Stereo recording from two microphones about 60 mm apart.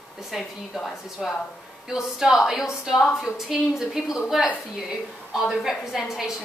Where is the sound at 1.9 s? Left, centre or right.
Centre.